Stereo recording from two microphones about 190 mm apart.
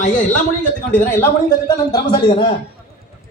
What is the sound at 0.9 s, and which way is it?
Speech, 10° left (ahead or behind).